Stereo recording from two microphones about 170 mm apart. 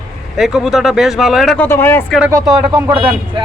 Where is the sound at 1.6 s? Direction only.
15° left (ahead or behind).